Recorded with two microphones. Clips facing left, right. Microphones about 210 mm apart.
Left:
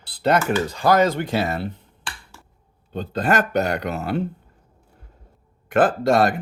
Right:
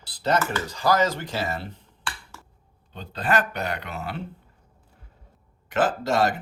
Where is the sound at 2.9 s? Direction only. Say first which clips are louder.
Left 5 dB; 45° left (ahead or behind).